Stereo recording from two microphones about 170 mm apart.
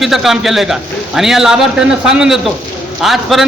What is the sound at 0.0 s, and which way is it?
A man's voice, centre (ahead or behind).